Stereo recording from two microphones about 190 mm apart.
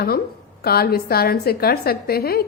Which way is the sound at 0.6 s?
55° left (ahead or behind).